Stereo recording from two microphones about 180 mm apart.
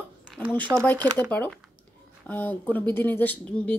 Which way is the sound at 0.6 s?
20° right (ahead or behind).